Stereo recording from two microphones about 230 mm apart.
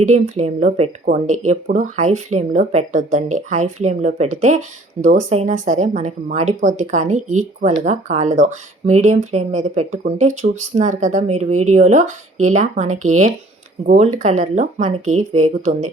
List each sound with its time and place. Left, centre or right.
0.1 s speech: right